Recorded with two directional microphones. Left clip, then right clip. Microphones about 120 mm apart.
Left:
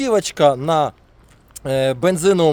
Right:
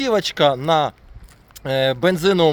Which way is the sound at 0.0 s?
40° left (ahead or behind).